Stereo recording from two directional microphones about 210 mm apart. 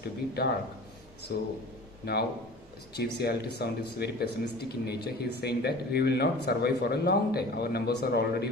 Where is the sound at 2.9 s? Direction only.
50° left (ahead or behind).